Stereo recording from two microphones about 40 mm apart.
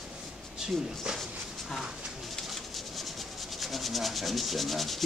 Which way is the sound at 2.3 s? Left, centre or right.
Centre.